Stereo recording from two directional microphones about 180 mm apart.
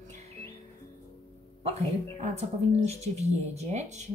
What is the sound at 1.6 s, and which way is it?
Speech, 35° right (ahead or behind).